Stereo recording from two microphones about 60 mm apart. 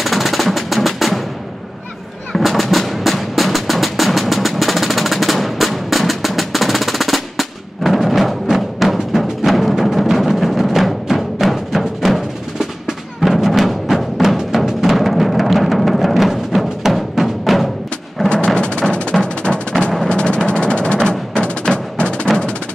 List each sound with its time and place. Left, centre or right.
0.0 s percussion: centre
2.3 s music: centre
18.3 s music: centre